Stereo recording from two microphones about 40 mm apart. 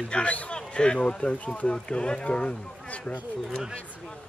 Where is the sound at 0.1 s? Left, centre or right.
Left.